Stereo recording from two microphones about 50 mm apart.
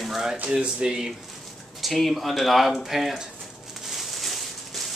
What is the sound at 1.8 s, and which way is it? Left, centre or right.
Speech, centre.